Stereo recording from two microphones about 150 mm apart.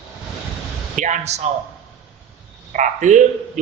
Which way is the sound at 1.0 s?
55° right (ahead or behind).